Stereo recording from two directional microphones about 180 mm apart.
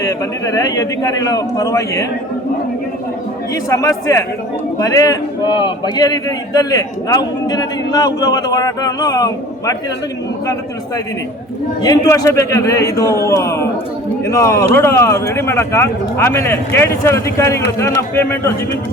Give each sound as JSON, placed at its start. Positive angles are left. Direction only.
{"t": 0.0, "sound": "a man's voice", "side_deg": 20}
{"t": 3.5, "sound": "a man's voice", "side_deg": 20}